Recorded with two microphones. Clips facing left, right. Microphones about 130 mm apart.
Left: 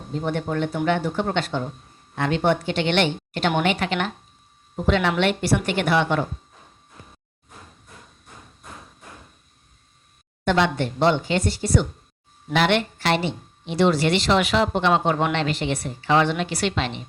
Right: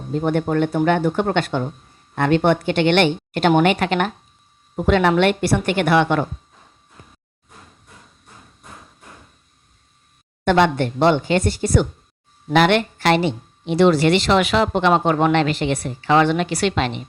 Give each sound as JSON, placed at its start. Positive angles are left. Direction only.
{"t": 0.1, "sound": "a woman's voice", "side_deg": -50}
{"t": 10.4, "sound": "a woman's voice", "side_deg": -55}
{"t": 15.2, "sound": "a woman's voice", "side_deg": -50}